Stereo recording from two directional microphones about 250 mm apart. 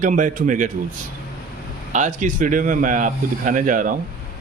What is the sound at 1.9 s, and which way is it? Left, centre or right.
A man's voice, right.